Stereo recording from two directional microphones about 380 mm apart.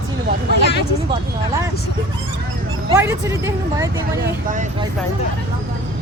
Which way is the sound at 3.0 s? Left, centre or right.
Centre.